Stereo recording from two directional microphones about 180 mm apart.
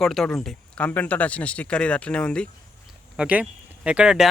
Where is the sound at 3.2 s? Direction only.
10° right (ahead or behind).